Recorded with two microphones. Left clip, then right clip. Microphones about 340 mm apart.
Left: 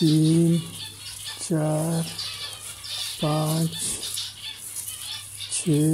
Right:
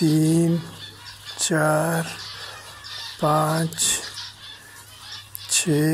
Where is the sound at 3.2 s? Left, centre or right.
Right.